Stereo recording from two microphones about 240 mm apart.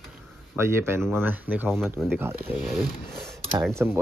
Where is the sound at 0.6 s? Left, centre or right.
Centre.